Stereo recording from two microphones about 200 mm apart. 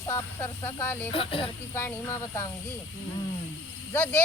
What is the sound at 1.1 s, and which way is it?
Speech, 25° left (ahead or behind).